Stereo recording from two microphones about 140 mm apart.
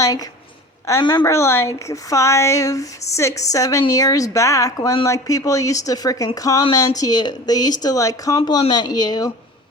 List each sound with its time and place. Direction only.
0.0 s speech: 25° left (ahead or behind)